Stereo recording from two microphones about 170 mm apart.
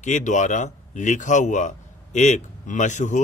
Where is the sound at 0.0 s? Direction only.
45° left (ahead or behind).